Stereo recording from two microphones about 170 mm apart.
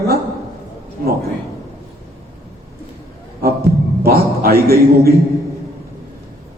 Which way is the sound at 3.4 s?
60° right (ahead or behind).